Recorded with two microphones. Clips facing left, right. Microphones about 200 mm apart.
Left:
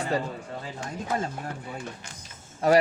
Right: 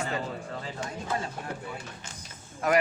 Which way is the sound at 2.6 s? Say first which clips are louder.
Left 5 dB; 30° left (ahead or behind).